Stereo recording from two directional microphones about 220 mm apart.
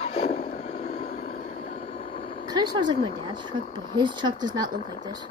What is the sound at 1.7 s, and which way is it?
Vehicle, 25° left (ahead or behind).